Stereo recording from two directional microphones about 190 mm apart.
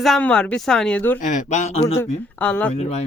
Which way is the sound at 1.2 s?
40° left (ahead or behind).